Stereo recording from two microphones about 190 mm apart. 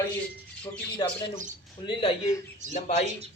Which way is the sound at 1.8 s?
30° left (ahead or behind).